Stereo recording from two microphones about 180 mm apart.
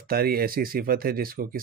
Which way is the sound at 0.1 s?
55° right (ahead or behind).